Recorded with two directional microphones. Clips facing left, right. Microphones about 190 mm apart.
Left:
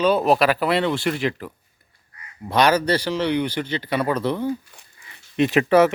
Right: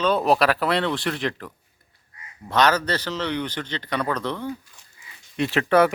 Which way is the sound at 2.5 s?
10° left (ahead or behind).